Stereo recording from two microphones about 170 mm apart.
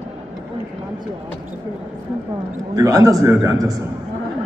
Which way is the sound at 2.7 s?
20° right (ahead or behind).